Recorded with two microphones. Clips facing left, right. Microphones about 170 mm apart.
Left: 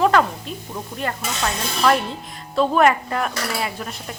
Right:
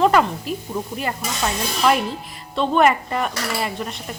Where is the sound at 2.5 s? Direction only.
Centre (ahead or behind).